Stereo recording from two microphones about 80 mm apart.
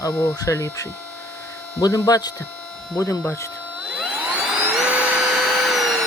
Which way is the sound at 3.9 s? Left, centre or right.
Centre.